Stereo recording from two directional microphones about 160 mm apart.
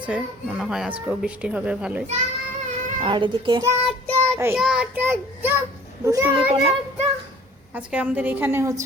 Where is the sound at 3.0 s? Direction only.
30° right (ahead or behind).